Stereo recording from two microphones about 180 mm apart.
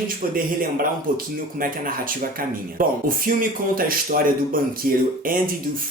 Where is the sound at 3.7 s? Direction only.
50° right (ahead or behind).